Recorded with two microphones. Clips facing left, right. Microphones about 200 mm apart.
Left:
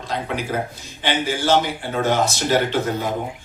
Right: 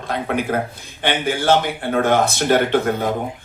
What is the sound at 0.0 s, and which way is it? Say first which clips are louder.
A man's voice: right 4 dB; 55° right (ahead or behind).